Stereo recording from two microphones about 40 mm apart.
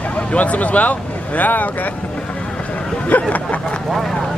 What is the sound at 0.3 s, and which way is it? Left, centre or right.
Speech, left.